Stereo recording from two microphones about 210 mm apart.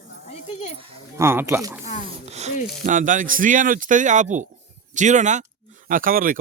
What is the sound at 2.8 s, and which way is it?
A man's voice, 35° right (ahead or behind).